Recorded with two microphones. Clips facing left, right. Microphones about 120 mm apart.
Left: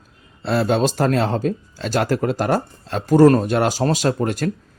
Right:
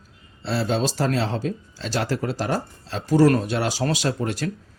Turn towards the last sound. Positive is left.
turn(degrees=45)  # may be behind; listen again after turning